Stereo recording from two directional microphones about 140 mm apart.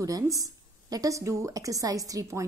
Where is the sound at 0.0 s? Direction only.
25° right (ahead or behind).